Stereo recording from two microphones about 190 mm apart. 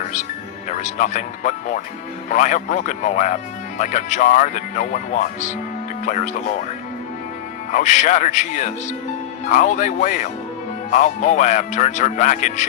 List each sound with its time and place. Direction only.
0.0 s music: 40° left (ahead or behind)
0.7 s speech: 40° left (ahead or behind)
7.7 s speech: 40° left (ahead or behind)